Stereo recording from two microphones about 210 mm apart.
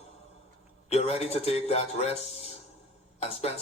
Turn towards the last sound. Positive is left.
turn(degrees=30)  # may be behind; listen again after turning